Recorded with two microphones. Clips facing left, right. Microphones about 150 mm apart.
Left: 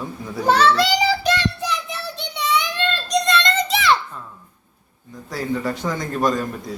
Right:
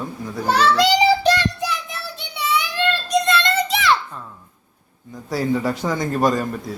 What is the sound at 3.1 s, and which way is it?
Children playing, 5° right (ahead or behind).